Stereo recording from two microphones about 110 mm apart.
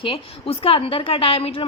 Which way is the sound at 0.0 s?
55° left (ahead or behind).